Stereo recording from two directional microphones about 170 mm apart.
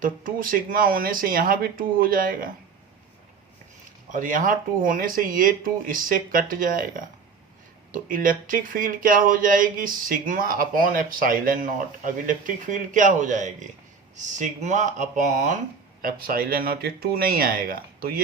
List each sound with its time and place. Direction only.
0.0 s speech: 55° right (ahead or behind)
4.1 s speech: 50° right (ahead or behind)
16.0 s speech: 60° right (ahead or behind)